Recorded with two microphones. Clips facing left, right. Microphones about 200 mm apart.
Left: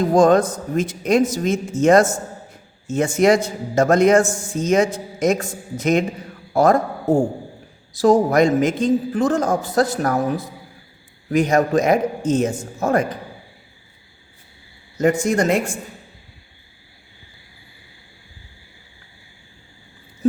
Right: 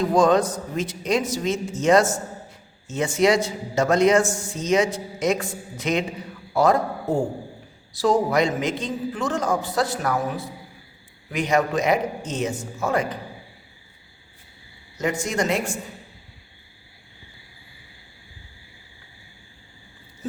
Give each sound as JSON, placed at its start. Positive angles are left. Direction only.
{"t": 0.0, "sound": "a man's voice", "side_deg": 45}
{"t": 14.9, "sound": "a man's voice", "side_deg": 55}